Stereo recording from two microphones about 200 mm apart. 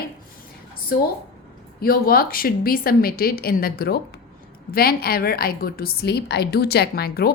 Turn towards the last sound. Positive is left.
turn(degrees=50)  # may be behind; listen again after turning